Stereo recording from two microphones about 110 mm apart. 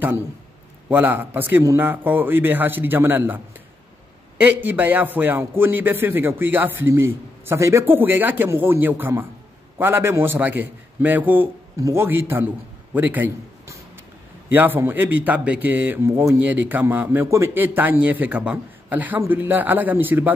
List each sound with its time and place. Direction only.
0.8 s speech: 15° right (ahead or behind)
4.4 s a man's voice: 15° right (ahead or behind)
14.5 s speech: 15° right (ahead or behind)